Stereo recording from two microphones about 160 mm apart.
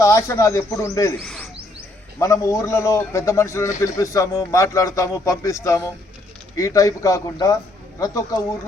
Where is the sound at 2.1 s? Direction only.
20° left (ahead or behind).